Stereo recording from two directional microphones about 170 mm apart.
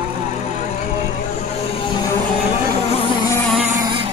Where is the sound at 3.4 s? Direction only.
5° right (ahead or behind).